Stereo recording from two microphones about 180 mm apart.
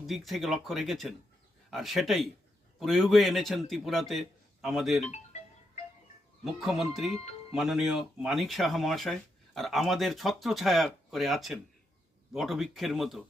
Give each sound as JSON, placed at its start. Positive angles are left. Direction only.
{"t": 0.0, "sound": "speech", "side_deg": 0}
{"t": 5.1, "sound": "music", "side_deg": 40}
{"t": 6.4, "sound": "speech", "side_deg": 0}